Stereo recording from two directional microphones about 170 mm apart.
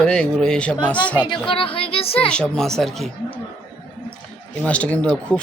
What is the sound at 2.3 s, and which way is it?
Speech, 5° left (ahead or behind).